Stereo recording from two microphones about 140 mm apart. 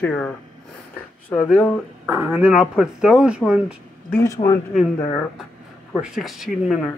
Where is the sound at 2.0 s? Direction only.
10° right (ahead or behind).